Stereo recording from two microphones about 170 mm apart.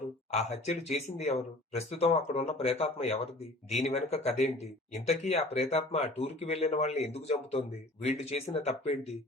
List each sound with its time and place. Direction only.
0.3 s speech: 40° left (ahead or behind)